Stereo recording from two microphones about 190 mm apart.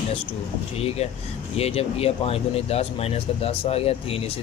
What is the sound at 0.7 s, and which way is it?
Speech, 30° left (ahead or behind).